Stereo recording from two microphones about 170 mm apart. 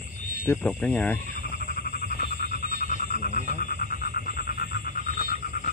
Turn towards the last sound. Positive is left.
turn(degrees=60)  # may be behind; listen again after turning